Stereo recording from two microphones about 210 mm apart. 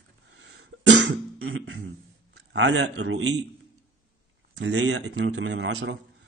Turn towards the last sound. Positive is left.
turn(degrees=-60)  # may be behind; listen again after turning